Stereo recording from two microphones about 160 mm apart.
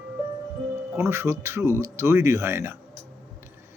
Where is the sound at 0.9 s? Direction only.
15° right (ahead or behind).